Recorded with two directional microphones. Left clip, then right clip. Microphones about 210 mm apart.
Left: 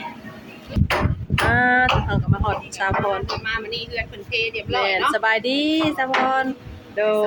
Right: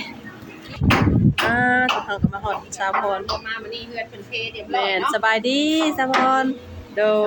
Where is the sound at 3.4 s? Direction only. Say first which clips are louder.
Left 4 dB; 55° left (ahead or behind).